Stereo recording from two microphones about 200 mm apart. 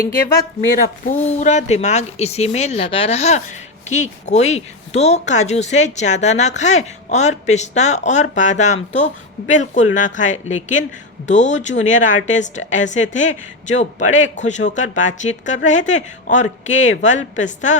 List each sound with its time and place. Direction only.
1.2 s speech: 35° left (ahead or behind)